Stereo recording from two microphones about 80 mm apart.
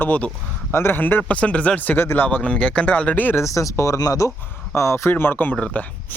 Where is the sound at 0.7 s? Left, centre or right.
Left.